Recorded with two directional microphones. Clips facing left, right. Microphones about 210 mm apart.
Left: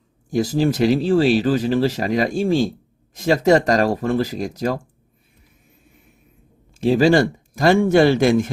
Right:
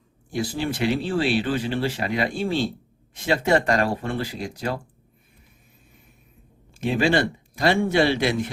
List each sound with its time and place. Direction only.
0.3 s speech: 40° left (ahead or behind)
6.7 s speech: 35° left (ahead or behind)